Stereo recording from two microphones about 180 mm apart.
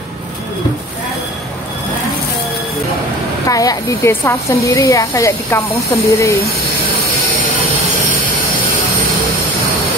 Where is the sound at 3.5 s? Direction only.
20° left (ahead or behind).